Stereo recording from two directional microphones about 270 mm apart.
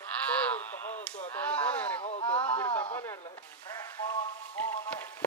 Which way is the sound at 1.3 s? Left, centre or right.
Centre.